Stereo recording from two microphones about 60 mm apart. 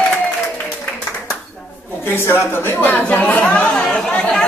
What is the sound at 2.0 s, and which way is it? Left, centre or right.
Speech, left.